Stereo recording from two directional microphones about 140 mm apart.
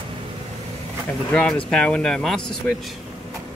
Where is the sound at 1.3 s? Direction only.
10° left (ahead or behind).